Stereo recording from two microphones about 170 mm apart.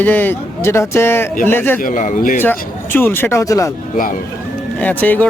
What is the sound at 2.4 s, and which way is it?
A man's voice, 10° left (ahead or behind).